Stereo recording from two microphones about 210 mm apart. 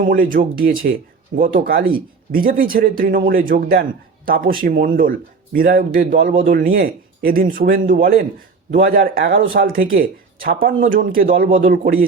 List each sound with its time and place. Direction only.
0.0 s speech: 40° right (ahead or behind)